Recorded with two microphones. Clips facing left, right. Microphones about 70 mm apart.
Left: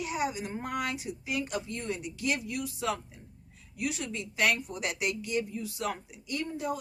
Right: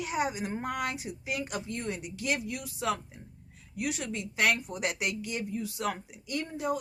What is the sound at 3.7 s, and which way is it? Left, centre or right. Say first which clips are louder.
A woman's voice: right 1 dB; right.